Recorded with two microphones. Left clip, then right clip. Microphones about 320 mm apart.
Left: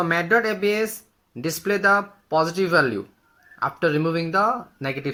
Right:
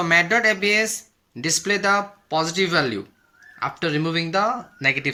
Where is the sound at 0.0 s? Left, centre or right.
Right.